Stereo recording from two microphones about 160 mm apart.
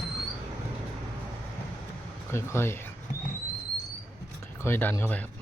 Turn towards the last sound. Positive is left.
turn(degrees=10)  # may be behind; listen again after turning